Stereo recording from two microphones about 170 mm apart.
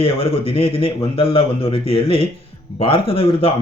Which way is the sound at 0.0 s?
35° left (ahead or behind).